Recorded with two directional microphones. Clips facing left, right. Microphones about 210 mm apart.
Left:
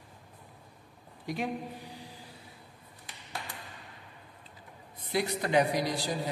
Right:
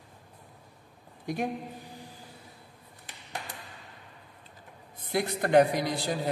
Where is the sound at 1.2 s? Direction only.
50° right (ahead or behind).